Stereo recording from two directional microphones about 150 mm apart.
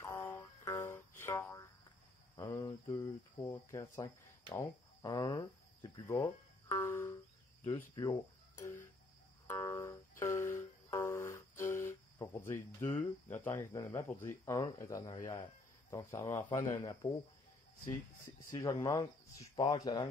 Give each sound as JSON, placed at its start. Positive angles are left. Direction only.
{"t": 0.0, "sound": "music", "side_deg": 15}
{"t": 2.3, "sound": "speech", "side_deg": 20}
{"t": 7.6, "sound": "speech", "side_deg": 30}
{"t": 9.5, "sound": "music", "side_deg": 20}
{"t": 12.4, "sound": "speech", "side_deg": 15}
{"t": 18.5, "sound": "speech", "side_deg": 20}